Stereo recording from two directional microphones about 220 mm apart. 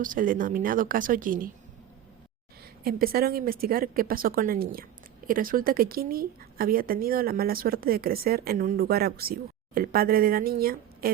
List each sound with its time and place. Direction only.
0.0 s a woman's voice: 40° right (ahead or behind)
2.8 s a woman's voice: 45° right (ahead or behind)